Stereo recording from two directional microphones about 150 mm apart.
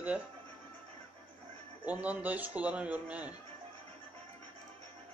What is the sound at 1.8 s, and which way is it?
Speech, 10° right (ahead or behind).